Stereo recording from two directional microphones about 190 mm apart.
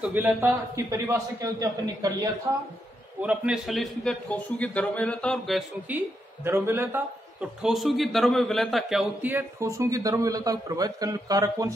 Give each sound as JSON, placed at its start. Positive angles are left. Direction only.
{"t": 0.0, "sound": "a man's voice", "side_deg": -10}
{"t": 5.9, "sound": "a man's voice", "side_deg": -10}
{"t": 7.6, "sound": "a man's voice", "side_deg": 0}